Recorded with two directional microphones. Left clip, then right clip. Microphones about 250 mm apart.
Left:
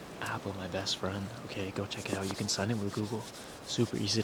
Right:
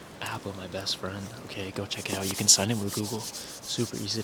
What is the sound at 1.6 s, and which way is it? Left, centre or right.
Speech, centre.